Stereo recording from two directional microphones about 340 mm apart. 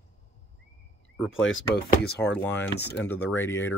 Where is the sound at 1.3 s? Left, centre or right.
Left.